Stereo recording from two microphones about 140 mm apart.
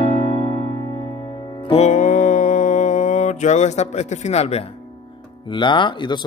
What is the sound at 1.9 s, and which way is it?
Mantra, 65° left (ahead or behind).